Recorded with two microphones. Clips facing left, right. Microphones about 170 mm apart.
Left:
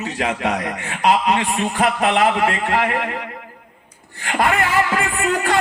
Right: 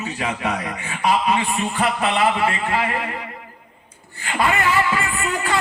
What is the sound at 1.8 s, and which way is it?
Speech, 55° left (ahead or behind).